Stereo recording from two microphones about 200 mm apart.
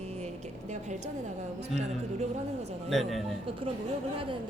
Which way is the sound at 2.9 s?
Centre (ahead or behind).